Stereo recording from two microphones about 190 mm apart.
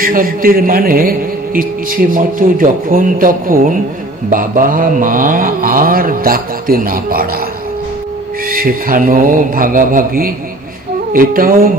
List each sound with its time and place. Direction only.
0.0 s a man's voice: 50° right (ahead or behind)
8.5 s a man's voice: 50° right (ahead or behind)